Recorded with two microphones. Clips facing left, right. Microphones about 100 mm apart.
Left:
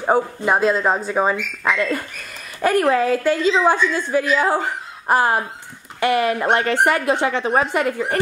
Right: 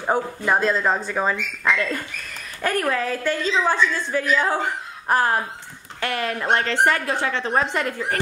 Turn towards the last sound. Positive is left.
turn(degrees=10)  # may be behind; listen again after turning